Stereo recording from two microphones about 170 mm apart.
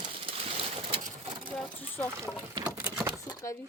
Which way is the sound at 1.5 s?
10° left (ahead or behind).